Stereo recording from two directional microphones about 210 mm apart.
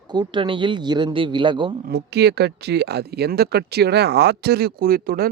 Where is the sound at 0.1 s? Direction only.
20° right (ahead or behind).